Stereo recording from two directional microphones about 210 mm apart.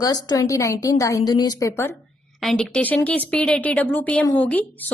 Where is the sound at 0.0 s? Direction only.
20° left (ahead or behind).